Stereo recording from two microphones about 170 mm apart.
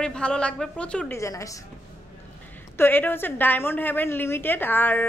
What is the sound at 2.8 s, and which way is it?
A woman's voice, 10° left (ahead or behind).